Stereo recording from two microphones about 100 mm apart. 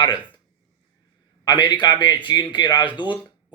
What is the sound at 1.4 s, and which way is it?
Speech, 50° left (ahead or behind).